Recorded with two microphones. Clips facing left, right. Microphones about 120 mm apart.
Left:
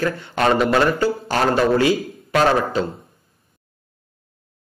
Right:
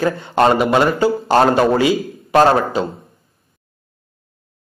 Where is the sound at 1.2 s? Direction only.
35° right (ahead or behind).